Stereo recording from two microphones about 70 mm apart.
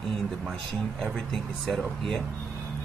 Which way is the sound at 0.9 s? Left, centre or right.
Centre.